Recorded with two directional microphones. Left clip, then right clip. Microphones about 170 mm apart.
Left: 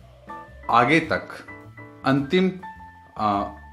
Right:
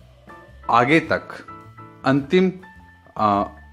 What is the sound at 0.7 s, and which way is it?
Speech, 40° right (ahead or behind).